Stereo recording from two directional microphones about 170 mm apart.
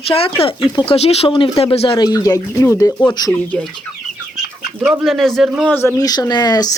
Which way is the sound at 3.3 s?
10° left (ahead or behind).